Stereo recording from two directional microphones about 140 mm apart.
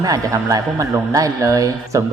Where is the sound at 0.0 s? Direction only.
25° right (ahead or behind).